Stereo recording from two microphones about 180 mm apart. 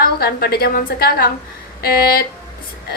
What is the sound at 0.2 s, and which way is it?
A woman's voice, 60° left (ahead or behind).